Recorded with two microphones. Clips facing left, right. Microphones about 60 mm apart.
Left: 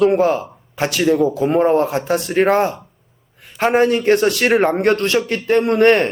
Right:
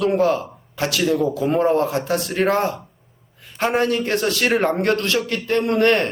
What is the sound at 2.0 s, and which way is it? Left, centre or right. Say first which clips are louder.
Speech: left 4 dB; centre.